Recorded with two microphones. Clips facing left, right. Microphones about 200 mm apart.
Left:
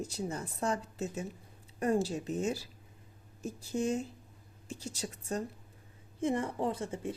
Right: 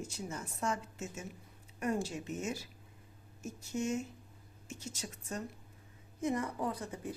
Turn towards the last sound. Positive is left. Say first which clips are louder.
# left 4 dB
turn(degrees=25)  # may be behind; listen again after turning